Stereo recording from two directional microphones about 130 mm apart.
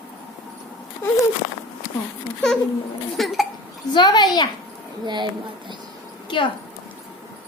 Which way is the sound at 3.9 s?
35° left (ahead or behind).